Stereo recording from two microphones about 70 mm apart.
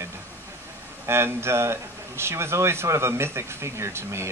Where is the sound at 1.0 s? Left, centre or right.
Right.